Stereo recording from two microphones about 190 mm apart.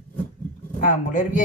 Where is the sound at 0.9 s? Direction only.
40° left (ahead or behind).